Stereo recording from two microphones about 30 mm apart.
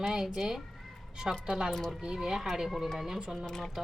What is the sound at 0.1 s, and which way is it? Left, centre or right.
Speech, centre.